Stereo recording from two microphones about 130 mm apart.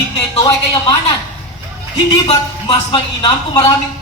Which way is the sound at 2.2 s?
45° left (ahead or behind).